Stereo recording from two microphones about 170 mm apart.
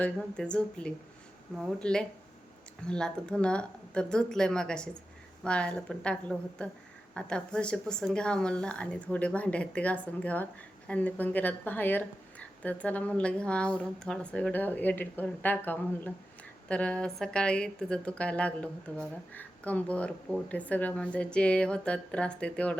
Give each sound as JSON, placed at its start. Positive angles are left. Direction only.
{"t": 0.0, "sound": "speech", "side_deg": 5}